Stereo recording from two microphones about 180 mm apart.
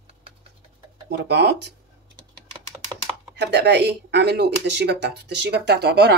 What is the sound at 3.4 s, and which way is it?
Speech, 70° right (ahead or behind).